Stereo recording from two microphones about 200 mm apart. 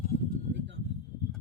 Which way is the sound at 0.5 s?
60° right (ahead or behind).